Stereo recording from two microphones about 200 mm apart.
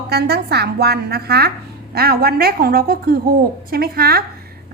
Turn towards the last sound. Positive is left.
turn(degrees=-50)  # may be behind; listen again after turning